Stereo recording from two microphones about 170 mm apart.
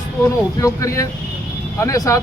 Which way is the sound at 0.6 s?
20° left (ahead or behind).